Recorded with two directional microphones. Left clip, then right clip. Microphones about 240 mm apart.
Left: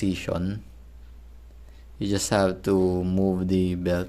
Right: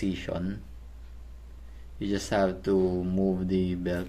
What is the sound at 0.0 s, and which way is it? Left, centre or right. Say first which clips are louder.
Speech: left 4 dB; left.